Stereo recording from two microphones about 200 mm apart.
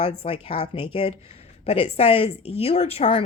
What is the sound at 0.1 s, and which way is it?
A woman's voice, 30° left (ahead or behind).